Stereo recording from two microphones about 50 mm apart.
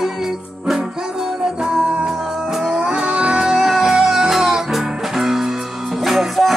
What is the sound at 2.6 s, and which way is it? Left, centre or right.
Music, centre.